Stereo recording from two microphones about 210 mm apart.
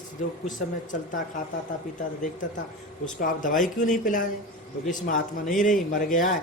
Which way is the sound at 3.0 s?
40° left (ahead or behind).